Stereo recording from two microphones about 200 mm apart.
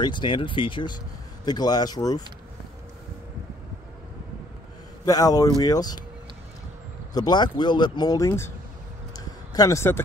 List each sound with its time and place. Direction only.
0.0 s speech: 25° left (ahead or behind)
5.0 s a man's voice: 20° left (ahead or behind)
7.2 s speech: 20° left (ahead or behind)
9.1 s a sound: 20° left (ahead or behind)